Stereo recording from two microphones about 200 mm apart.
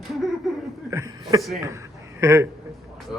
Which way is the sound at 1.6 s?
15° right (ahead or behind).